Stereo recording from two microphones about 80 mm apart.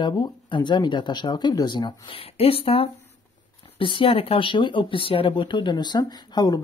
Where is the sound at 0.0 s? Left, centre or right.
Left.